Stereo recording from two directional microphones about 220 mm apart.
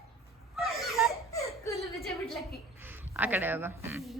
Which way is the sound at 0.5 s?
Centre (ahead or behind).